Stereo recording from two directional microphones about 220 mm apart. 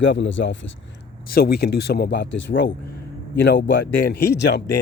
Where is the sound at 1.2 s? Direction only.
45° left (ahead or behind).